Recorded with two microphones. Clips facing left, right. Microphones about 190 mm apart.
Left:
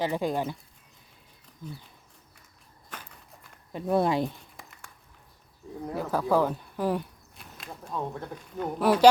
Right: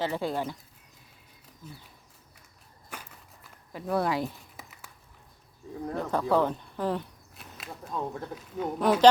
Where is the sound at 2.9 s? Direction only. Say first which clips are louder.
Even; 10° right (ahead or behind).